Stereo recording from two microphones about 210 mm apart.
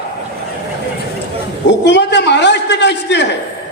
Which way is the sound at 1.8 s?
55° left (ahead or behind).